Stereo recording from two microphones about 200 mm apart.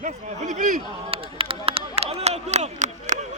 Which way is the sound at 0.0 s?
35° right (ahead or behind).